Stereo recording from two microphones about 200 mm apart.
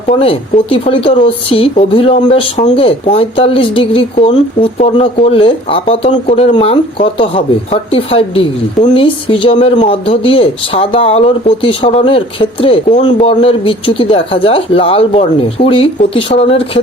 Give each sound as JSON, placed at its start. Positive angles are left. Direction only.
{"t": 0.1, "sound": "speech", "side_deg": 30}